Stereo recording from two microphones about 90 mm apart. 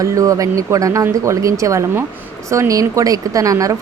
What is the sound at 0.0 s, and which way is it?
A woman's voice, 40° right (ahead or behind).